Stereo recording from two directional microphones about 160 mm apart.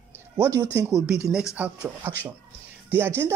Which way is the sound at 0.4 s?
20° right (ahead or behind).